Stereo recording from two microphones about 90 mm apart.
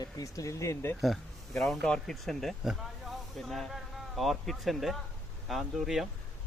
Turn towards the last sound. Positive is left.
turn(degrees=-5)  # may be behind; listen again after turning